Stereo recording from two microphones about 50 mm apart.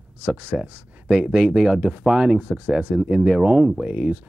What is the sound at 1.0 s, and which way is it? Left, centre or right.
Speech, centre.